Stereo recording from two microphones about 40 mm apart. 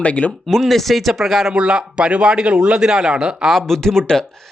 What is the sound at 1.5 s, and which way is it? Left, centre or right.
Speech, right.